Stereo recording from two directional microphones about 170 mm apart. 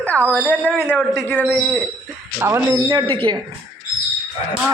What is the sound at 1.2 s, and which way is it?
Speech, 5° left (ahead or behind).